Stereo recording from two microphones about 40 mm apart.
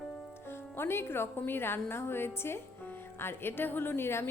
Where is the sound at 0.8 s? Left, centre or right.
Left.